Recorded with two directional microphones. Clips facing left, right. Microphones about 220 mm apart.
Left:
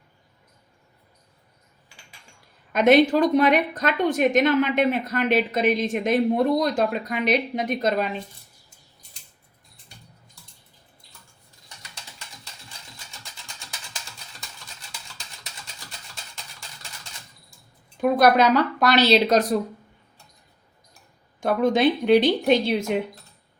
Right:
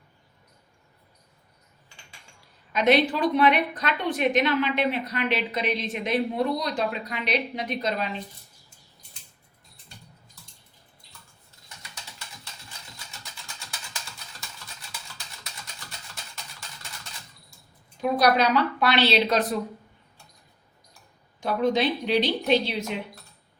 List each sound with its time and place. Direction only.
2.7 s a woman's voice: 50° left (ahead or behind)
18.0 s a woman's voice: 50° left (ahead or behind)
21.4 s a woman's voice: 50° left (ahead or behind)